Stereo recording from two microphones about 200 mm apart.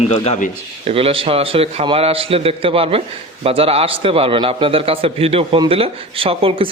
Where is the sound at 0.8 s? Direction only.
30° right (ahead or behind).